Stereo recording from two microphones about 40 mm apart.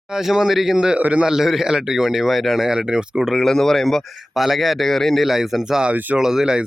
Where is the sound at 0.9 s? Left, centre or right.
Right.